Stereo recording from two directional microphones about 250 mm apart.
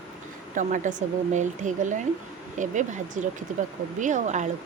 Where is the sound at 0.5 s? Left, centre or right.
Right.